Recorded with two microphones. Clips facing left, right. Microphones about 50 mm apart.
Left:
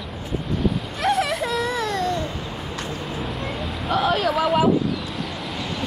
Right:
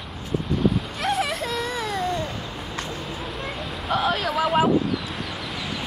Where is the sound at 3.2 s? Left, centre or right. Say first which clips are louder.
Left 3 dB; centre.